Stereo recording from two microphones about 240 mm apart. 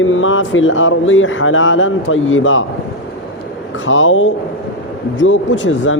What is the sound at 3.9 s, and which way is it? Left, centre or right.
Speech, left.